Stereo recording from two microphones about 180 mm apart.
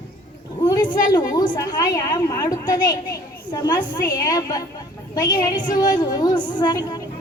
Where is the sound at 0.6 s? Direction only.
20° left (ahead or behind).